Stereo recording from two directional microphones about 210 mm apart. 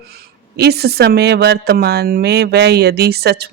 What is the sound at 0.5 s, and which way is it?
Speech, 50° right (ahead or behind).